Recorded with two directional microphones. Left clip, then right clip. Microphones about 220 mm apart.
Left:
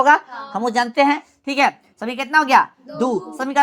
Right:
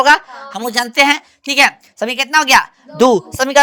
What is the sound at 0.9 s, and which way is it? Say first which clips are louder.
A woman's voice: right 4 dB; 55° right (ahead or behind).